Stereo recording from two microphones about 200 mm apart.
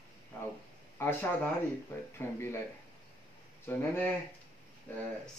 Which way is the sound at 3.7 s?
10° left (ahead or behind).